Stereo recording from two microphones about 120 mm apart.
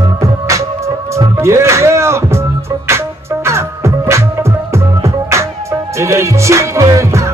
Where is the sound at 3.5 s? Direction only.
20° right (ahead or behind).